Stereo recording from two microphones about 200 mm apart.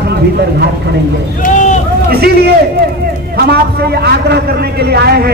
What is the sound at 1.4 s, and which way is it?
Vehicle, 40° left (ahead or behind).